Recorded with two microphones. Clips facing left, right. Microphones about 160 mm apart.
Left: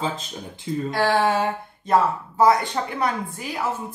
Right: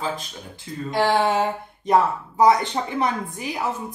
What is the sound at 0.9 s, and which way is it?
Speech, 20° right (ahead or behind).